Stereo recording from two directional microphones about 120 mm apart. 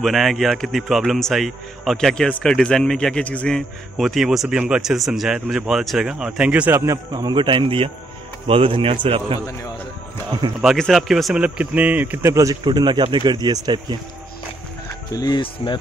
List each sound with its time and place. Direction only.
0.0 s a man's voice: centre (ahead or behind); by 7.0 s 20° right (ahead or behind)
7.1 s a man's voice: 35° right (ahead or behind)
10.6 s speech: centre (ahead or behind); by 12.5 s 25° right (ahead or behind)
12.6 s speech: 40° right (ahead or behind)
15.0 s speech: 30° left (ahead or behind)
15.4 s speech: 45° left (ahead or behind)